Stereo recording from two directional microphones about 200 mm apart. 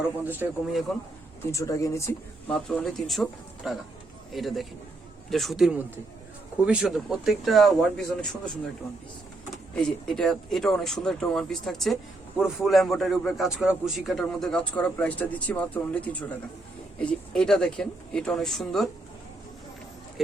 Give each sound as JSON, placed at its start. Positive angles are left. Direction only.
{"t": 0.3, "sound": "speech", "side_deg": -10}
{"t": 1.5, "sound": "speech", "side_deg": 15}
{"t": 2.6, "sound": "a man's voice", "side_deg": 0}
{"t": 9.7, "sound": "a man's voice", "side_deg": 5}